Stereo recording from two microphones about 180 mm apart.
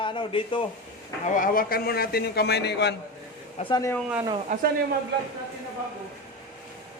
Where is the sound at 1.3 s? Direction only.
50° left (ahead or behind); by 3.0 s 70° left (ahead or behind).